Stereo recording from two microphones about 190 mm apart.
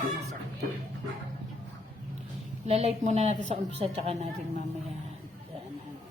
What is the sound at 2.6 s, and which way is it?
A woman's voice, 35° right (ahead or behind).